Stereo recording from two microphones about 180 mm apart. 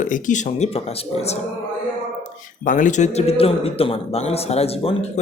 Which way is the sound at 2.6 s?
45° left (ahead or behind).